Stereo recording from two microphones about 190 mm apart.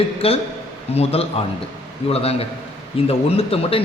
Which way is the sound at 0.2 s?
30° left (ahead or behind).